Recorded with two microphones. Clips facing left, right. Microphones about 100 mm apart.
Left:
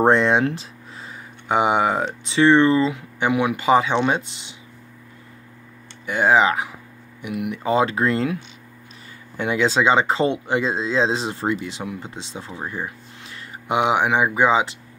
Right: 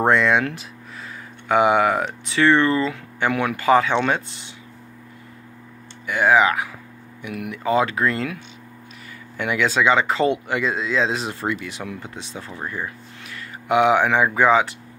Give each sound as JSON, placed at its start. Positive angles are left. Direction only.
{"t": 0.0, "sound": "speech", "side_deg": 25}
{"t": 6.0, "sound": "speech", "side_deg": 25}
{"t": 9.4, "sound": "speech", "side_deg": 25}